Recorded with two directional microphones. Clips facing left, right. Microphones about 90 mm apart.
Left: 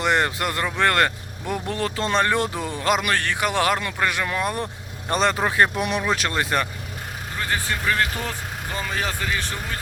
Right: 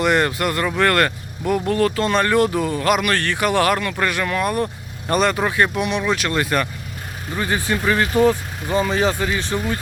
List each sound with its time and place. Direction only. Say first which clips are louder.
0.0 s speech: right 3 dB; 20° left (ahead or behind)
6.3 s speech: right 3 dB; 25° left (ahead or behind)
7.3 s speech: right 5 dB; 15° right (ahead or behind)